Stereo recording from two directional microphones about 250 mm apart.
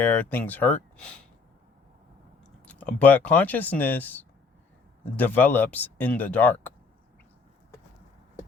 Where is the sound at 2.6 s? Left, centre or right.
Centre.